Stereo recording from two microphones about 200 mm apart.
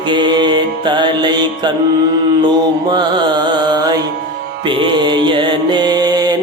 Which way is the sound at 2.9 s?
20° right (ahead or behind).